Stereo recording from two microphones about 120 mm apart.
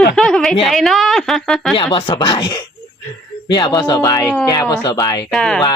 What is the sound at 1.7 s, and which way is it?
Speech, 45° left (ahead or behind).